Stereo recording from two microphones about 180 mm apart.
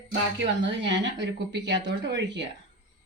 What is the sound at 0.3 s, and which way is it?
Speech, 80° right.